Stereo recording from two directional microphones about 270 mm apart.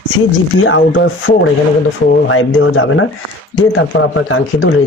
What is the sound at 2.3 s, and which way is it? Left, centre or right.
Speech, left.